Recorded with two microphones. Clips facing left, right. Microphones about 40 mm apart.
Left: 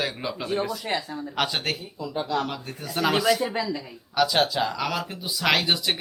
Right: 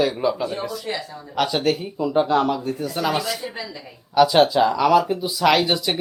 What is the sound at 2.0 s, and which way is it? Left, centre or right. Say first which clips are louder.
Speech: right 9 dB; right.